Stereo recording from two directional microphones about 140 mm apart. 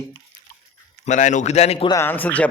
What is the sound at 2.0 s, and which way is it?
Speech, 15° left (ahead or behind).